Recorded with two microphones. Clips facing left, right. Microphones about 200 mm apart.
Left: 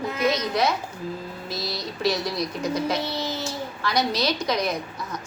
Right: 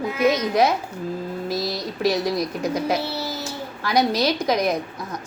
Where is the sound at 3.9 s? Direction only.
50° right (ahead or behind).